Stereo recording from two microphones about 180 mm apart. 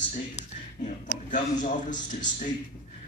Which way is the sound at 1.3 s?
45° left (ahead or behind).